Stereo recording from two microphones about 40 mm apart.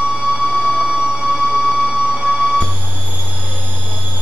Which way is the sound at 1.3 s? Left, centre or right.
Centre.